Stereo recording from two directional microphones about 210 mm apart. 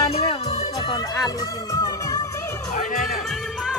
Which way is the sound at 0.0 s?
25° left (ahead or behind).